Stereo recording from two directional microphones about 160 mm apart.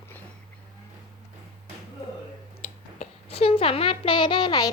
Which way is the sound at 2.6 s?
40° left (ahead or behind).